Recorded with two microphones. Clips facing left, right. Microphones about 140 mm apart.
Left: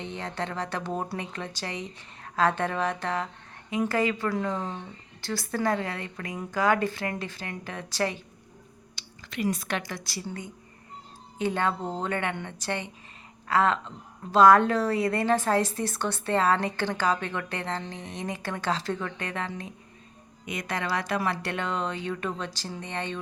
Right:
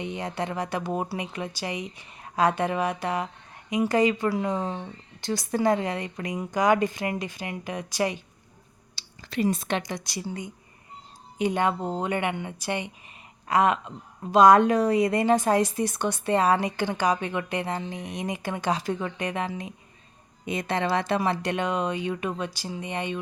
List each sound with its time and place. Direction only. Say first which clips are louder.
0.0 s a woman's voice: right 3 dB; 15° right (ahead or behind)
9.0 s a woman's voice: right 5 dB; 35° right (ahead or behind); by 19.7 s 15° right (ahead or behind)
20.4 s a woman's voice: right 5 dB; 25° right (ahead or behind)